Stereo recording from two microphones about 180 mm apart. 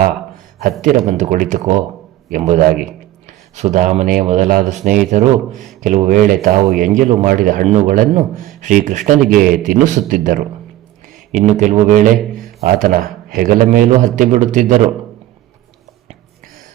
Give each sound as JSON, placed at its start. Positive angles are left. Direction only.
{"t": 0.6, "sound": "speech", "side_deg": -45}
{"t": 5.5, "sound": "speech", "side_deg": 0}
{"t": 5.8, "sound": "speech", "side_deg": -45}